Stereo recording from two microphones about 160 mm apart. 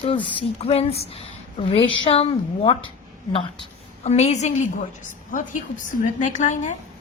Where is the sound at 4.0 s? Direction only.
40° left (ahead or behind).